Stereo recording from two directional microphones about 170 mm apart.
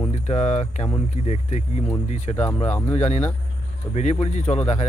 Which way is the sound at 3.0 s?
45° left (ahead or behind).